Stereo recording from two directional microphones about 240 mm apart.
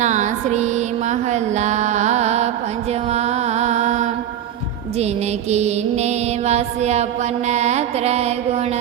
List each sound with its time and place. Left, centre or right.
0.0 s a sound: right
3.1 s music: right
4.9 s mantra: right